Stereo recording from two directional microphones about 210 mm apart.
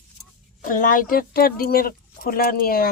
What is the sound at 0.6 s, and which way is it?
Speech, 40° left (ahead or behind).